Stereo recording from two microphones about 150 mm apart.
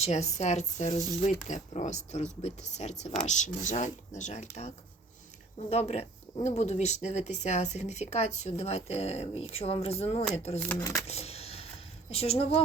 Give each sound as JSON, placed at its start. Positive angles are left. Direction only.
{"t": 0.0, "sound": "speech", "side_deg": 45}
{"t": 5.7, "sound": "speech", "side_deg": 45}
{"t": 10.7, "sound": "speech", "side_deg": 20}
{"t": 11.0, "sound": "a sound", "side_deg": 45}
{"t": 12.1, "sound": "speech", "side_deg": 40}